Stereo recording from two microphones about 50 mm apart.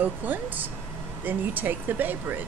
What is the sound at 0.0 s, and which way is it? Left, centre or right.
Speech, right.